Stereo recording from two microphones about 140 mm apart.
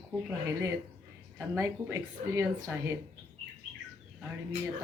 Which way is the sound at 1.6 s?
20° right (ahead or behind).